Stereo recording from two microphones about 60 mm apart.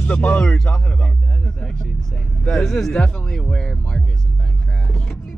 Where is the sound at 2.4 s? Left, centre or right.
Centre.